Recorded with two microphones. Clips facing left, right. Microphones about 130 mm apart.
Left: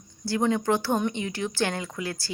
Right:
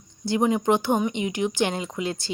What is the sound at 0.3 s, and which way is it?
A woman's voice, 20° right (ahead or behind).